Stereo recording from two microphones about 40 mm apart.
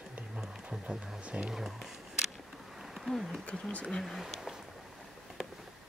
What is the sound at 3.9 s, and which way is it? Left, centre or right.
Speech, centre.